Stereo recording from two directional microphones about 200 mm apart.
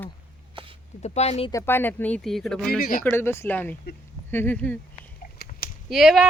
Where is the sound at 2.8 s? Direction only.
45° left (ahead or behind).